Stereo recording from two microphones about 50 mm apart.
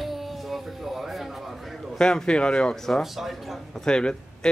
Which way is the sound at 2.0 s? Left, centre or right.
Centre.